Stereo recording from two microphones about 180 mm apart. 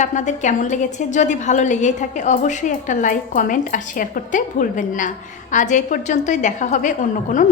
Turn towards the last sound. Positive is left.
turn(degrees=45)  # may be behind; listen again after turning